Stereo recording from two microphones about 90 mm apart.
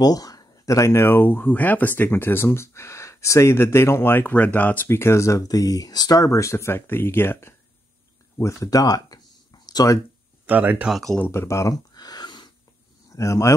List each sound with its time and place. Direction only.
0.0 s speech: 45° left (ahead or behind); by 4.8 s 20° left (ahead or behind)
4.8 s speech: 30° left (ahead or behind)
8.4 s a sound: 35° left (ahead or behind)
10.4 s speech: 20° right (ahead or behind)
11.1 s speech: 25° left (ahead or behind)
11.9 s a sound: 50° left (ahead or behind)
13.1 s speech: 35° left (ahead or behind)